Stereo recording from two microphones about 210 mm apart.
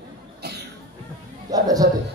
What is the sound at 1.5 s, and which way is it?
Speech, 15° right (ahead or behind).